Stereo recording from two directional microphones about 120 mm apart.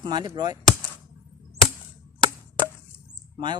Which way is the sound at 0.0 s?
35° right (ahead or behind).